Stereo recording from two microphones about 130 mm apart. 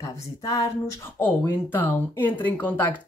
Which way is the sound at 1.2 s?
15° left (ahead or behind).